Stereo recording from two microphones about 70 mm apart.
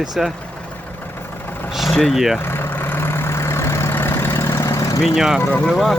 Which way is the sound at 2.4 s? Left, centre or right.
Left.